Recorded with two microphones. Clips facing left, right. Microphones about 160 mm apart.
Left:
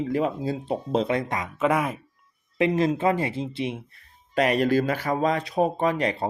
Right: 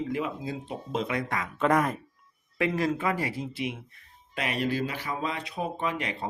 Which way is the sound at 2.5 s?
20° left (ahead or behind).